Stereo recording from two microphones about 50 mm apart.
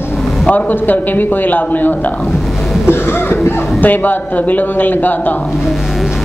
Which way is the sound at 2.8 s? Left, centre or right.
Left.